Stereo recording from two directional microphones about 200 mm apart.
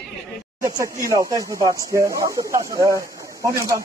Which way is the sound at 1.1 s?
15° right (ahead or behind).